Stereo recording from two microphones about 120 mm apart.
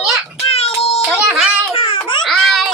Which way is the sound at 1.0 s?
10° right (ahead or behind).